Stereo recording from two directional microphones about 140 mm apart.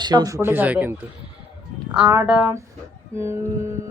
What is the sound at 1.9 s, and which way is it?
A woman's voice, 10° right (ahead or behind).